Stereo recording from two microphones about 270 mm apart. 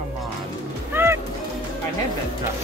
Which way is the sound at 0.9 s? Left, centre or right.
Centre.